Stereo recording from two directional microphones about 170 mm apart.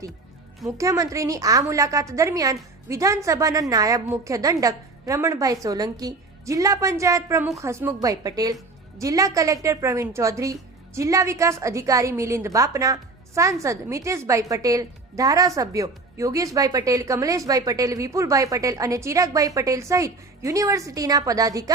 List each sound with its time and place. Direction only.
0.8 s a woman's voice: 20° right (ahead or behind)